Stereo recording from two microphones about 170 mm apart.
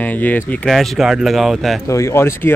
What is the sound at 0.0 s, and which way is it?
Speech, 10° left (ahead or behind).